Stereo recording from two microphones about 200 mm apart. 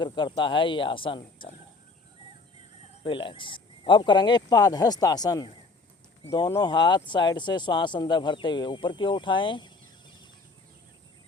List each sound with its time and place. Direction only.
0.0 s speech: 25° left (ahead or behind)
3.0 s speech: 25° left (ahead or behind)